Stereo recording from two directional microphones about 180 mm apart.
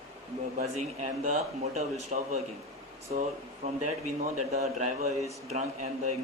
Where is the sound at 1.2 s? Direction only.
40° right (ahead or behind).